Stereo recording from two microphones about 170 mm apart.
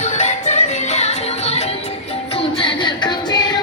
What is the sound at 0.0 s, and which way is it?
Music, 45° left (ahead or behind).